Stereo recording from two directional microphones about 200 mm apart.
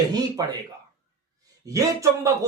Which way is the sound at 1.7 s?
15° right (ahead or behind).